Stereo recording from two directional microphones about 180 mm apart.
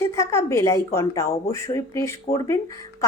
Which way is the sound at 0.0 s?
15° left (ahead or behind).